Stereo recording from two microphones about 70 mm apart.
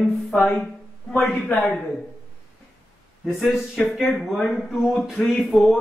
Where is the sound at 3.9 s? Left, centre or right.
Centre.